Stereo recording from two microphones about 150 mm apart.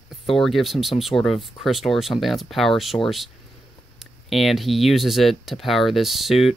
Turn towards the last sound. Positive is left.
turn(degrees=0)  # may be behind; listen again after turning